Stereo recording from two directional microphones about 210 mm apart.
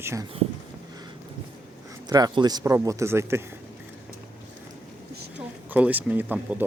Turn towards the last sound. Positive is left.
turn(degrees=-10)  # may be behind; listen again after turning